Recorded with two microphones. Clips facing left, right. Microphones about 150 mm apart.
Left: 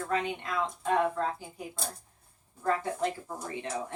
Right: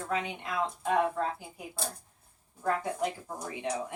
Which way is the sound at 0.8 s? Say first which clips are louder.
Even; 10° right (ahead or behind).